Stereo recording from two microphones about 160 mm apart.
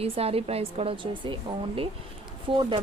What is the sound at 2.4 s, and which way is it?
Speech, 30° right (ahead or behind).